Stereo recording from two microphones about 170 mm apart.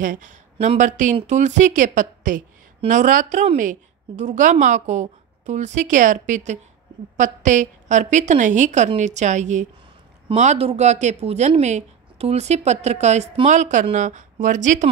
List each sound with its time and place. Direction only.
0.0 s a woman's voice: 50° right (ahead or behind)